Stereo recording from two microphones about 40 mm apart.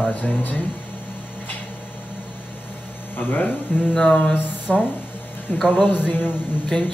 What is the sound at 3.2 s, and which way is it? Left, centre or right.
Speech, left.